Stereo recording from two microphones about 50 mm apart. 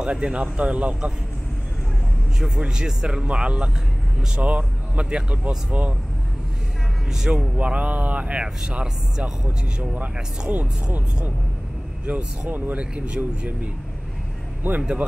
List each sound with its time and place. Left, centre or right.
0.0 s speech: right
2.3 s speech: centre; by 5.9 s right
7.1 s a man's voice: centre
7.3 s speech: right
10.5 s speech: right
12.1 s speech: right
12.7 s speech: right
14.8 s speech: right